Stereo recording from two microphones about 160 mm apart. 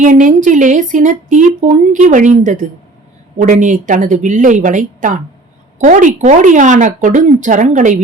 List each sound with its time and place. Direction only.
0.0 s speech: 55° right (ahead or behind)